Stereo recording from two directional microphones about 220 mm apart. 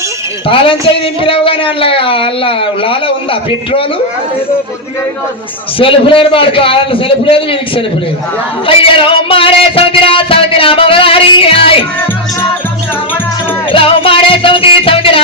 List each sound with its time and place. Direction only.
0.4 s speech: 25° left (ahead or behind)
5.8 s speech: 25° left (ahead or behind)
13.7 s music: 25° left (ahead or behind)